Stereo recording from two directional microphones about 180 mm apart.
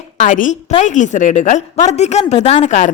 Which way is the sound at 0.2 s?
45° left (ahead or behind).